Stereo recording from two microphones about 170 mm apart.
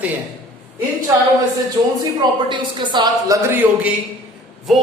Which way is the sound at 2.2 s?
25° right (ahead or behind).